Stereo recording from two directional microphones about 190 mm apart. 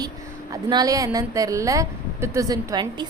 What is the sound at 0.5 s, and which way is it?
A woman's voice, 20° right (ahead or behind).